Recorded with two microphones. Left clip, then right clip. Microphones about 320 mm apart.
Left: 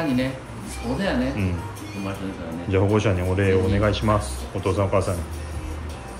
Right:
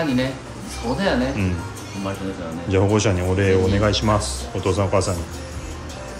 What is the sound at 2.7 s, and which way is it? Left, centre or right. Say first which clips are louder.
Speech: right 2 dB; centre.